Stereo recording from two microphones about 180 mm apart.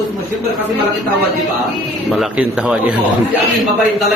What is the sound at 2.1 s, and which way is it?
Speech, 5° right (ahead or behind).